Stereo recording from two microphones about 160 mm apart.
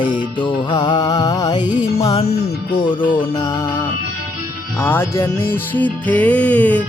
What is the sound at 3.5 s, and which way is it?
Music, 15° left (ahead or behind).